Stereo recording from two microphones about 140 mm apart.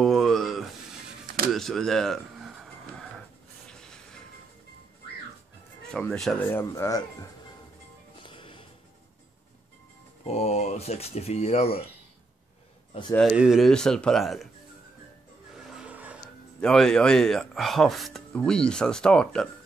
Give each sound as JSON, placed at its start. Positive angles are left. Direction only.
{"t": 0.0, "sound": "a sound", "side_deg": 0}
{"t": 1.2, "sound": "a sound", "side_deg": -90}
{"t": 1.5, "sound": "a sound", "side_deg": 5}
{"t": 5.9, "sound": "speech", "side_deg": 5}
{"t": 6.4, "sound": "speech", "side_deg": 20}
{"t": 8.2, "sound": "music", "side_deg": 35}
{"t": 10.2, "sound": "speech", "side_deg": 50}
{"t": 13.3, "sound": "speech", "side_deg": -5}
{"t": 15.5, "sound": "vehicle", "side_deg": -5}
{"t": 16.6, "sound": "speech", "side_deg": 5}